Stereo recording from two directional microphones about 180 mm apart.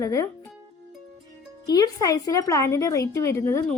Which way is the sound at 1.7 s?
20° left (ahead or behind).